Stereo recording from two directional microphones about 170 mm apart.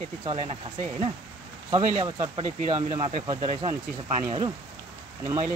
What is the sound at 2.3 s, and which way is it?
Speech, 30° right (ahead or behind).